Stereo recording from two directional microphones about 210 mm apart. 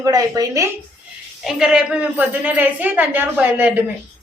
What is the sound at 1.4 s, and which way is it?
A woman's voice, 5° right (ahead or behind).